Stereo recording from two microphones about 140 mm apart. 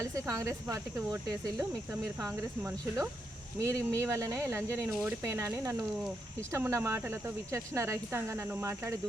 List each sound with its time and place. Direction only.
0.0 s speech: 20° right (ahead or behind)
1.5 s speech: 10° right (ahead or behind)